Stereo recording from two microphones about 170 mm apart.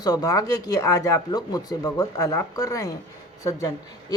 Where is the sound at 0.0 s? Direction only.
20° left (ahead or behind).